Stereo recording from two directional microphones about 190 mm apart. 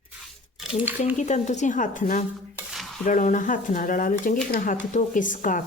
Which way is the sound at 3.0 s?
40° left (ahead or behind).